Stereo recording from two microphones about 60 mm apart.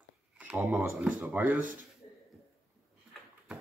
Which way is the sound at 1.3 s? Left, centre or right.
Right.